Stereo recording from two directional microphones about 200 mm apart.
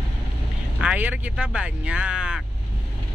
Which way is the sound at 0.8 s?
5° right (ahead or behind).